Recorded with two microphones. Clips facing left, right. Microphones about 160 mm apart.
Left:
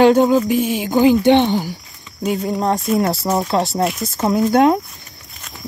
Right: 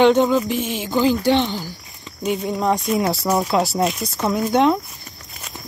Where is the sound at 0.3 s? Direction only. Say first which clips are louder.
Left 4 dB; 10° left (ahead or behind).